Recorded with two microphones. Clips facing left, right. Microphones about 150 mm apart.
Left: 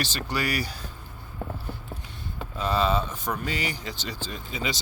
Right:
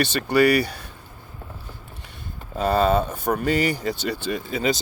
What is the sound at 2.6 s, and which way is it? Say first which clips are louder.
Speech: right 6 dB; 50° right (ahead or behind).